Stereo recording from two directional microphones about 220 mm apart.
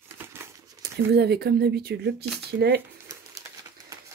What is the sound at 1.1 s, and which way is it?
Speech, 50° right (ahead or behind).